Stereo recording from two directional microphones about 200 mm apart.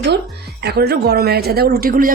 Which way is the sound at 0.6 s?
50° right (ahead or behind).